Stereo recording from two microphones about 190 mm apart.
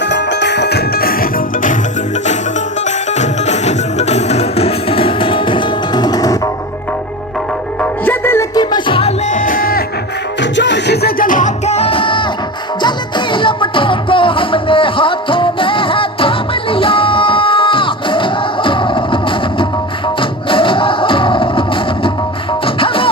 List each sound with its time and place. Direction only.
0.0 s music: 65° left (ahead or behind); by 1.7 s 50° left (ahead or behind)
2.8 s music: 35° left (ahead or behind); by 6.5 s 20° left (ahead or behind)
7.8 s music: 10° left (ahead or behind); by 9.8 s 50° left (ahead or behind)
10.4 s music: 70° left (ahead or behind); by 21.6 s 25° left (ahead or behind)
22.6 s music: 30° left (ahead or behind)